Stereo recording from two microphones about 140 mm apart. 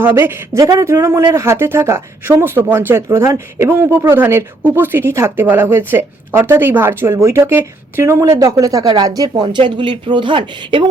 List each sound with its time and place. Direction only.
0.0 s speech: 15° right (ahead or behind); by 10.8 s 35° right (ahead or behind)